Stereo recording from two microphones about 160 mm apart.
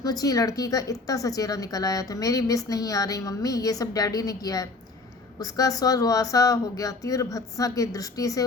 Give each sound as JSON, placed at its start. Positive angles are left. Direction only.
{"t": 0.0, "sound": "a woman's voice", "side_deg": 20}